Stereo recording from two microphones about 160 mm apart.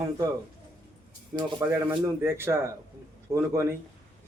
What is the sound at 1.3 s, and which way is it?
A man's voice, 20° right (ahead or behind).